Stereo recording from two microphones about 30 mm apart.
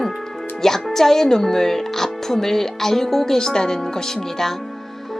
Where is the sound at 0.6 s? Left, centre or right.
Centre.